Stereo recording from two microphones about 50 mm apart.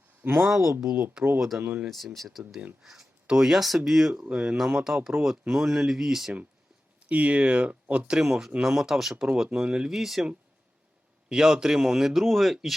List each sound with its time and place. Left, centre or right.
0.3 s speech: centre
0.8 s a man's voice: centre
1.4 s a man's voice: centre
7.1 s speech: right
8.1 s a man's voice: centre
9.2 s speech: centre
9.9 s speech: centre
11.3 s a man's voice: centre